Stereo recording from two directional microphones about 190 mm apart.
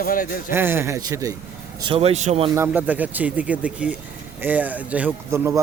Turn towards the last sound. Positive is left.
turn(degrees=-15)  # may be behind; listen again after turning